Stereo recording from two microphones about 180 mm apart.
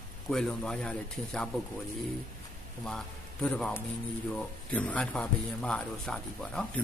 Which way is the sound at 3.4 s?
5° left (ahead or behind).